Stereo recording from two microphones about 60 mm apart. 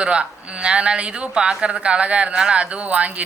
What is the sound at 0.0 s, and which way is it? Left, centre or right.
Speech, centre.